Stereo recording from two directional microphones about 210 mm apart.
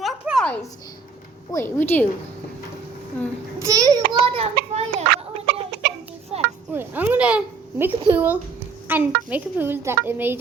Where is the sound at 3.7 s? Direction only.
15° right (ahead or behind).